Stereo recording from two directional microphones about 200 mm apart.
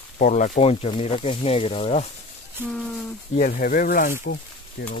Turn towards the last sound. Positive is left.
turn(degrees=50)  # may be behind; listen again after turning